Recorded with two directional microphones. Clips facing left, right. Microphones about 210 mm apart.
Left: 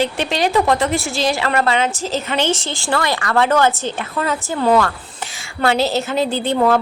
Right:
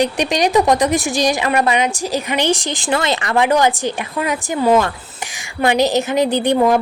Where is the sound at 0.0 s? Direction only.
15° right (ahead or behind).